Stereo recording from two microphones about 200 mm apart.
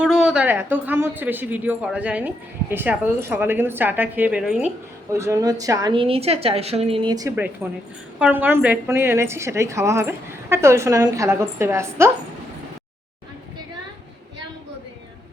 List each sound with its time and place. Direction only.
0.0 s a woman's voice: 5° right (ahead or behind)